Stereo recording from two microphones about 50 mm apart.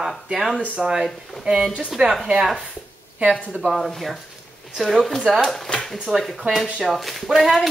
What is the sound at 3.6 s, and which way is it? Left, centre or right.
Speech, centre.